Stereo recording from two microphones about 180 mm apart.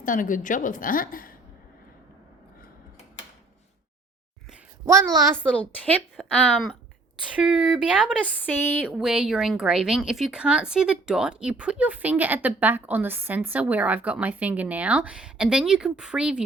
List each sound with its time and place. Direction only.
0.0 s a woman's voice: 45° left (ahead or behind)
5.1 s a child's voice: 20° right (ahead or behind)
5.4 s a woman's voice: 5° left (ahead or behind)
8.2 s a woman's voice: 10° left (ahead or behind)
8.8 s speech: 5° right (ahead or behind)